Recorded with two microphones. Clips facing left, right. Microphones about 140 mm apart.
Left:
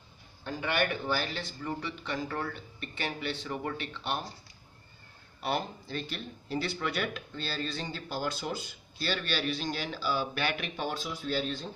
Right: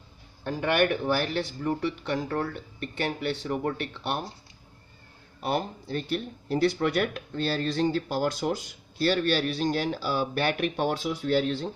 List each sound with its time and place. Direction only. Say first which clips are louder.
0.4 s speech: right 6 dB; 60° right (ahead or behind)
2.3 s speech: right 6 dB; 45° right (ahead or behind)
5.4 s speech: right 4 dB; 50° right (ahead or behind); by 11.7 s 65° right (ahead or behind)